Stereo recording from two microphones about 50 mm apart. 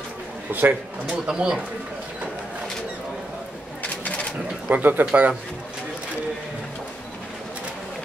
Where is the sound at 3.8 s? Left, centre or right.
Left.